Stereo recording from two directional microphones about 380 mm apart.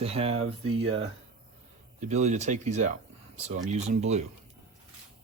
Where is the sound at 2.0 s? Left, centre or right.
Centre.